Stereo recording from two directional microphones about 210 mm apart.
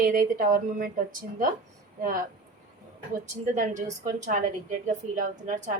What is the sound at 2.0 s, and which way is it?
Speech, 40° right (ahead or behind).